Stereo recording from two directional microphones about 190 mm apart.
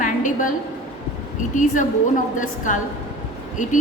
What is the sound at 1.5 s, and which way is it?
A woman's voice, 40° left (ahead or behind).